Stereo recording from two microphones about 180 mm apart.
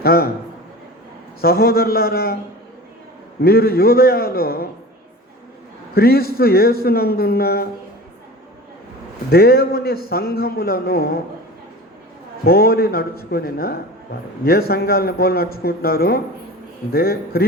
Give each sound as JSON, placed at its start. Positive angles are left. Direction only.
{"t": 0.0, "sound": "a man's voice", "side_deg": 55}
{"t": 1.4, "sound": "a man's voice", "side_deg": 55}
{"t": 3.4, "sound": "a man's voice", "side_deg": 55}
{"t": 5.9, "sound": "a man's voice", "side_deg": 60}
{"t": 9.3, "sound": "a man's voice", "side_deg": 60}
{"t": 12.5, "sound": "a man's voice", "side_deg": 55}